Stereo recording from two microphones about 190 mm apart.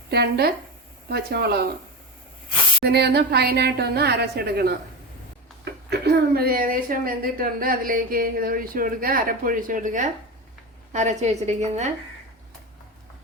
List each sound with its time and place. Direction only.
0.1 s a woman's voice: 55° right (ahead or behind)
2.8 s a woman's voice: 60° right (ahead or behind); by 11.9 s 35° right (ahead or behind)